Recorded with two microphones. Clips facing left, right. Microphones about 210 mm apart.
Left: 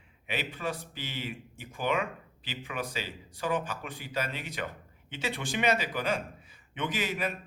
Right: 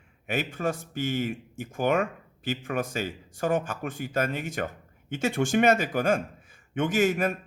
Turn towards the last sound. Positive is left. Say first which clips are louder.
# right 9 dB
turn(degrees=-50)  # may be behind; listen again after turning